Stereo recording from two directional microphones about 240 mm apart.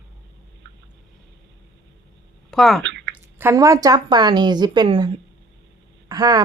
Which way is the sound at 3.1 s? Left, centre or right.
Centre.